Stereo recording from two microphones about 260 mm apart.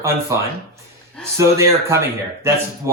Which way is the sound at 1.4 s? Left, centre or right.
Centre.